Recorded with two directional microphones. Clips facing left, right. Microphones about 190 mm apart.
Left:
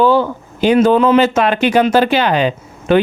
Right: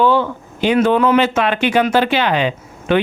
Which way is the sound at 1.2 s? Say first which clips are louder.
Left 3 dB; 40° left (ahead or behind).